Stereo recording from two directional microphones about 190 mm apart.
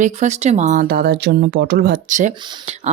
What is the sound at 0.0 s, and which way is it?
Speech, 35° right (ahead or behind).